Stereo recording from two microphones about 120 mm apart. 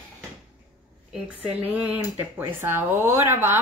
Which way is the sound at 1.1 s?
10° right (ahead or behind).